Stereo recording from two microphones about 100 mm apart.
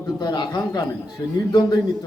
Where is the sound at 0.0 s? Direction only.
45° left (ahead or behind).